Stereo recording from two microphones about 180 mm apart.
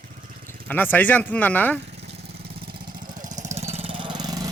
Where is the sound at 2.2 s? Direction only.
60° right (ahead or behind).